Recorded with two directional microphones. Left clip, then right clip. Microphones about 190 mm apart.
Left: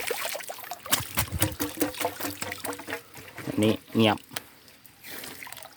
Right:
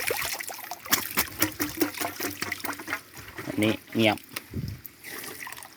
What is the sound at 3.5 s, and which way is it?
Speech, 25° left (ahead or behind).